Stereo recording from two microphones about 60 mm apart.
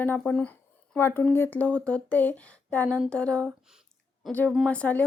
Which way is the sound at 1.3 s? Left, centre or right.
Left.